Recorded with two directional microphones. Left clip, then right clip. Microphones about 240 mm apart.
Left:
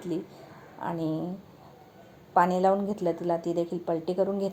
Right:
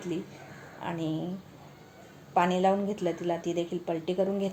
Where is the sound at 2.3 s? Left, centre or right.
Left.